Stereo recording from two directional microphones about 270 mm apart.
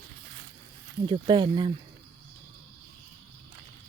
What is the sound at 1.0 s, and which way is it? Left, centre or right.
Speech, centre.